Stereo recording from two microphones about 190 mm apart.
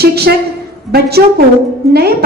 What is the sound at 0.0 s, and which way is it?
Speech, 55° right (ahead or behind).